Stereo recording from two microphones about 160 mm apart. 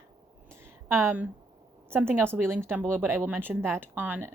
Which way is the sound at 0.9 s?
15° right (ahead or behind).